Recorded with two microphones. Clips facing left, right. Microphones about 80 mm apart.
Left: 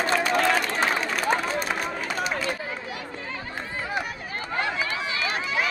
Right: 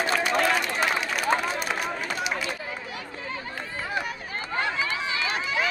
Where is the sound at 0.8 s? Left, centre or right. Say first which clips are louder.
Left 1 dB; left.